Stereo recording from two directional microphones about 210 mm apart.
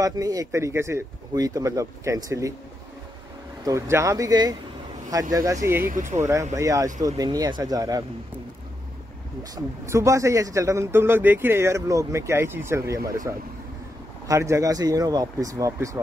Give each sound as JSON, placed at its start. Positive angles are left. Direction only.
{"t": 0.0, "sound": "a man's voice", "side_deg": -15}
{"t": 3.6, "sound": "a man's voice", "side_deg": -15}
{"t": 5.9, "sound": "speech", "side_deg": -35}
{"t": 6.5, "sound": "a man's voice", "side_deg": -15}
{"t": 9.4, "sound": "a man's voice", "side_deg": -15}